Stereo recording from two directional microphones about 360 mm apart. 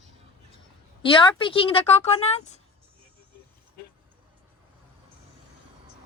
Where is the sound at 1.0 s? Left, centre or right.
Centre.